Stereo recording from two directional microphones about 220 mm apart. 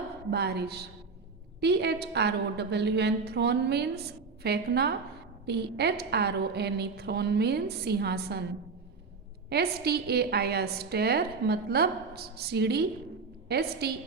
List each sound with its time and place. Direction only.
0.3 s a woman's voice: 50° right (ahead or behind)
9.5 s a woman's voice: 45° right (ahead or behind)